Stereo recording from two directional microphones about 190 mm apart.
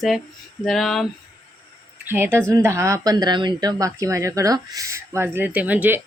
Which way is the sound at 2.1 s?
10° right (ahead or behind).